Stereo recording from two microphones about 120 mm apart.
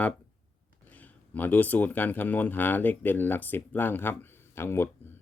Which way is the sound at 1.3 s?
15° left (ahead or behind).